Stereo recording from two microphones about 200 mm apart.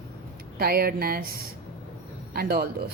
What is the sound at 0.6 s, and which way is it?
A woman's voice, 50° right (ahead or behind).